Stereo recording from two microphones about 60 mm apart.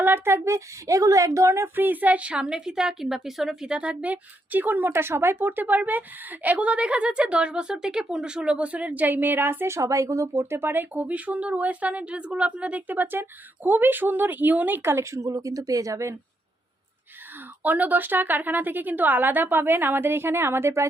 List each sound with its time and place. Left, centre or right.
0.0 s speech: right
1.7 s a woman's voice: right
4.9 s a woman's voice: right
9.7 s speech: right
17.6 s speech: right